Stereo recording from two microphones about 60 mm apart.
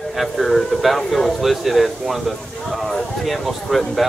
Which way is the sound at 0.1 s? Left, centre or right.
Centre.